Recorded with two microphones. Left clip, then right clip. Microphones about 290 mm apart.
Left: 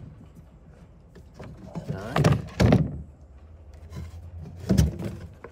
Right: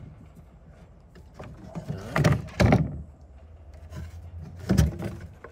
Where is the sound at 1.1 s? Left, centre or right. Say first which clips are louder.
Even; centre.